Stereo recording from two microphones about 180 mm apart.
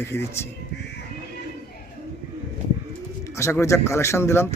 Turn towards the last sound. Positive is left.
turn(degrees=15)  # may be behind; listen again after turning